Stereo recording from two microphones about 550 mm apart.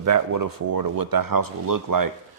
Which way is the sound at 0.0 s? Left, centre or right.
Right.